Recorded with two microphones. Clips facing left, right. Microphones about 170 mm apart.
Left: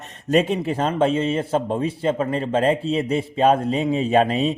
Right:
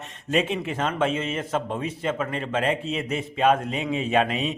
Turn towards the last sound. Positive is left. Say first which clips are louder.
# left 5 dB
turn(degrees=35)  # may be behind; listen again after turning